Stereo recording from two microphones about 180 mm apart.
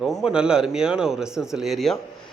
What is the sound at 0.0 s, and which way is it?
A man's voice, centre (ahead or behind).